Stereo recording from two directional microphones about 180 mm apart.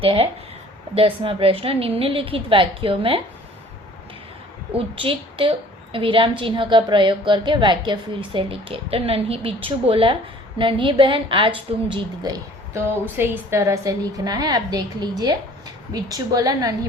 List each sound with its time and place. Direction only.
0.0 s a woman's voice: 30° right (ahead or behind)
4.7 s a woman's voice: 30° right (ahead or behind)